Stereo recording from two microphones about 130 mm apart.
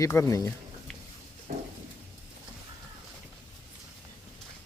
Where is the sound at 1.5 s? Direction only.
90° right.